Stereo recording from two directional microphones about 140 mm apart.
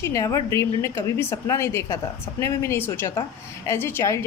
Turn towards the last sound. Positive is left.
turn(degrees=20)  # may be behind; listen again after turning